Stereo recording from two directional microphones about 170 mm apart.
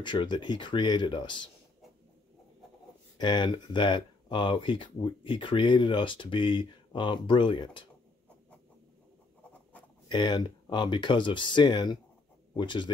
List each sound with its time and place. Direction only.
0.0 s speech: 30° left (ahead or behind)
3.2 s speech: 25° left (ahead or behind)
10.0 s speech: 25° left (ahead or behind)